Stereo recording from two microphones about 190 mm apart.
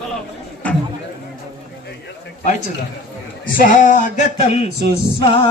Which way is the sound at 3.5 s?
45° left (ahead or behind).